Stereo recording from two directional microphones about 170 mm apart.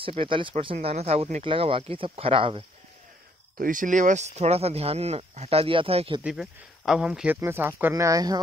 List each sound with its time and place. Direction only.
0.0 s speech: 30° right (ahead or behind)
3.5 s speech: 55° right (ahead or behind); by 6.2 s 35° right (ahead or behind)
6.2 s speech: 5° right (ahead or behind); by 8.4 s 20° right (ahead or behind)